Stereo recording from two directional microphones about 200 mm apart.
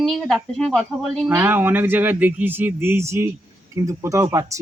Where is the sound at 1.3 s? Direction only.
10° right (ahead or behind).